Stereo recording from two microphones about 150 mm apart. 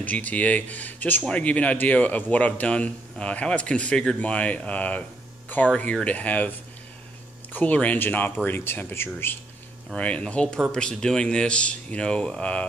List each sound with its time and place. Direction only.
0.0 s speech: 10° left (ahead or behind)
7.5 s speech: 10° left (ahead or behind)